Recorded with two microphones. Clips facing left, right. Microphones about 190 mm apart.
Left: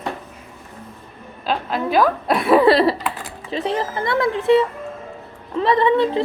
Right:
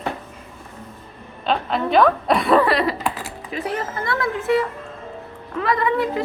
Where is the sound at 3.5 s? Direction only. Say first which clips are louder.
Left 4 dB; 30° left (ahead or behind).